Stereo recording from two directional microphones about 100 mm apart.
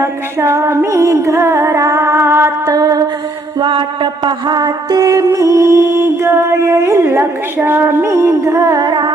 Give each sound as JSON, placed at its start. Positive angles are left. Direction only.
{"t": 0.0, "sound": "music", "side_deg": -25}
{"t": 2.6, "sound": "a sound", "side_deg": -40}
{"t": 3.6, "sound": "music", "side_deg": -55}
{"t": 8.8, "sound": "carnatic music", "side_deg": -50}